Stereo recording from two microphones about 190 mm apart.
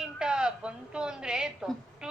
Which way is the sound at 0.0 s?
5° right (ahead or behind).